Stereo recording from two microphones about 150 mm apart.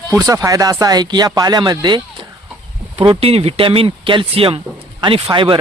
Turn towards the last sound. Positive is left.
turn(degrees=-35)  # may be behind; listen again after turning